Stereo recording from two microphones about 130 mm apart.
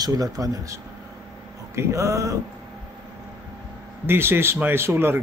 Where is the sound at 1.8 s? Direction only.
25° right (ahead or behind).